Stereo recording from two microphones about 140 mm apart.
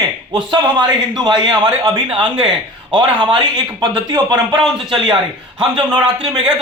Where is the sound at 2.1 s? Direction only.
5° right (ahead or behind).